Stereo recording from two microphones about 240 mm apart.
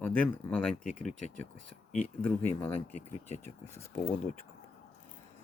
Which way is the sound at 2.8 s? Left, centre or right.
Left.